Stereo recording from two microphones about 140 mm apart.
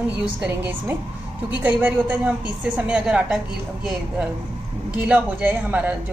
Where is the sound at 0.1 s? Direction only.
15° right (ahead or behind).